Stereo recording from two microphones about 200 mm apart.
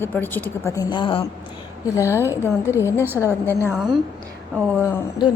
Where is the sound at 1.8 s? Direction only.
15° left (ahead or behind).